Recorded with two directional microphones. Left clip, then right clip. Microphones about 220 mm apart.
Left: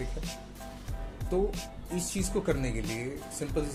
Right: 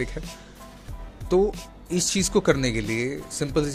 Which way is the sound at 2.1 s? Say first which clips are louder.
Right 9 dB; 40° right (ahead or behind).